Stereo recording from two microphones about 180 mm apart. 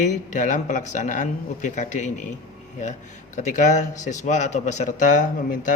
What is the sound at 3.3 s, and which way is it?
Speech, 45° left (ahead or behind).